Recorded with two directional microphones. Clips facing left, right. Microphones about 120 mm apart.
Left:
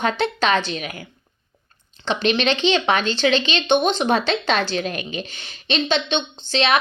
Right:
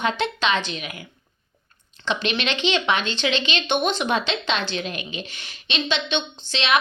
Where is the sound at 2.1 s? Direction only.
35° left (ahead or behind).